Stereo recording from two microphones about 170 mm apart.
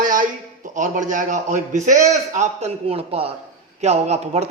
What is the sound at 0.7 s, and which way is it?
A man's voice, 50° right (ahead or behind).